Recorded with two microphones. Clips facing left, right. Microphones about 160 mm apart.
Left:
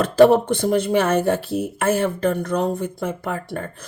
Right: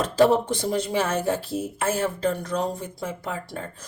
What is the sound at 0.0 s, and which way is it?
Speech, 60° left (ahead or behind).